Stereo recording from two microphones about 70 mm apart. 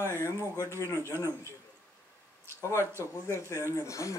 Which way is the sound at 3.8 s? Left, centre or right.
Left.